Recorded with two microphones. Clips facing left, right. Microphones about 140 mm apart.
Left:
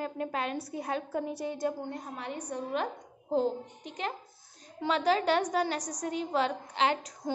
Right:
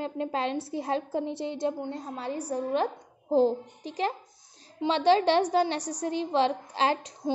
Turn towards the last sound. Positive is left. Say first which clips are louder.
# right 2 dB
turn(degrees=-30)  # may be behind; listen again after turning